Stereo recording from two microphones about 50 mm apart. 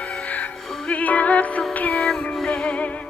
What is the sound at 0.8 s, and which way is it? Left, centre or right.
Music, left.